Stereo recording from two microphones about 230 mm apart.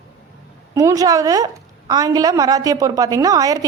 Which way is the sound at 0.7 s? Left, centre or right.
Centre.